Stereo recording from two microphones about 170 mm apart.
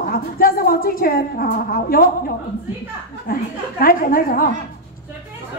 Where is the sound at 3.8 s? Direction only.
55° left (ahead or behind).